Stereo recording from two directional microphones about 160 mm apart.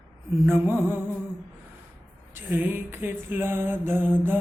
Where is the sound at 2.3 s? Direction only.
10° right (ahead or behind).